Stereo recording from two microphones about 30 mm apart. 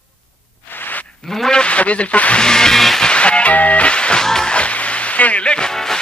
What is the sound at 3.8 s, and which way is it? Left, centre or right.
Music, left.